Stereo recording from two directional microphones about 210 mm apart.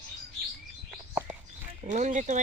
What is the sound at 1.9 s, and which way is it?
Speech, 35° right (ahead or behind).